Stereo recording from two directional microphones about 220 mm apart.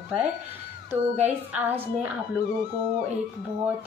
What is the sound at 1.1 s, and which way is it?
Speech, 10° right (ahead or behind).